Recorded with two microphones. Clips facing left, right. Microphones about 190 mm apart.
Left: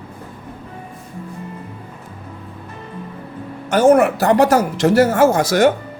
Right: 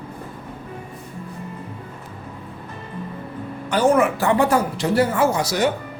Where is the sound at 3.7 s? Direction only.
45° left (ahead or behind).